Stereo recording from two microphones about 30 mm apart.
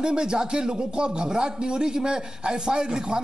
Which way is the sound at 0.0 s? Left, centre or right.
Right.